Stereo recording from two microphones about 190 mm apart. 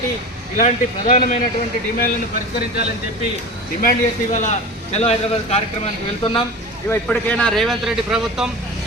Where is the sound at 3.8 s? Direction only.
45° left (ahead or behind).